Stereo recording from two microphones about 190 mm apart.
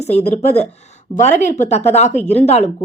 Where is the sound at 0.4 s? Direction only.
35° left (ahead or behind).